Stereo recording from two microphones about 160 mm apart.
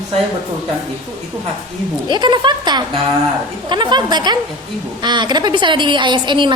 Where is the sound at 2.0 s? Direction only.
30° right (ahead or behind).